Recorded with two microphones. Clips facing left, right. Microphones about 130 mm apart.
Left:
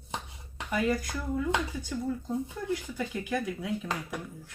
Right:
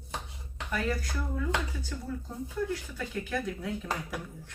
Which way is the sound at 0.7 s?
15° left (ahead or behind).